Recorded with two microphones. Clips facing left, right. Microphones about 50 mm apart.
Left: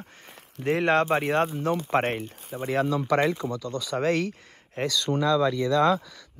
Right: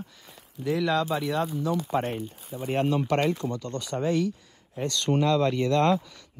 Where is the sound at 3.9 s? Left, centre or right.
Left.